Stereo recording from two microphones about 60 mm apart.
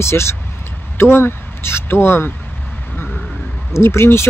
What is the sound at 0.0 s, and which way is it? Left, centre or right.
Speech, left.